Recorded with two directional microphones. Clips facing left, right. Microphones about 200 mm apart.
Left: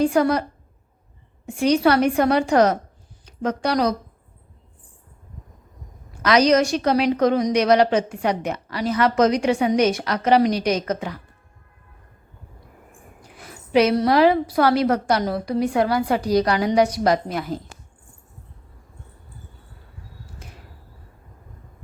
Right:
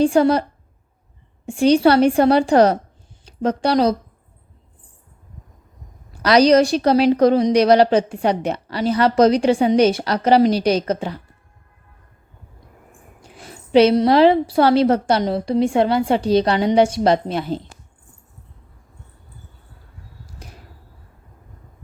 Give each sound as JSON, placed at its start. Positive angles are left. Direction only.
{"t": 0.0, "sound": "a woman's voice", "side_deg": -30}
{"t": 1.5, "sound": "a woman's voice", "side_deg": -30}
{"t": 6.2, "sound": "a woman's voice", "side_deg": -35}
{"t": 13.3, "sound": "a woman's voice", "side_deg": -30}